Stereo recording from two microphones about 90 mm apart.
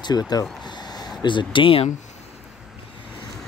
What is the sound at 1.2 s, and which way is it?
Speech, 60° left (ahead or behind).